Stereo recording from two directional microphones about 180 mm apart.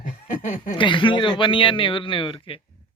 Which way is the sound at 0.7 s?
25° left (ahead or behind).